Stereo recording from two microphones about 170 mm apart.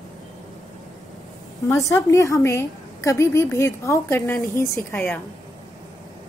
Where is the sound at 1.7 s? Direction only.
20° left (ahead or behind).